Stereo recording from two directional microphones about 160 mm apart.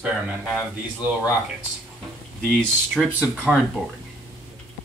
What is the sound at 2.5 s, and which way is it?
Speech, centre (ahead or behind).